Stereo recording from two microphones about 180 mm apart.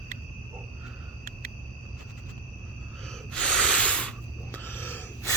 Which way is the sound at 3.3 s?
5° left (ahead or behind).